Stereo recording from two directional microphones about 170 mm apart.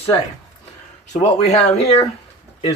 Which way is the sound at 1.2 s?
40° left (ahead or behind).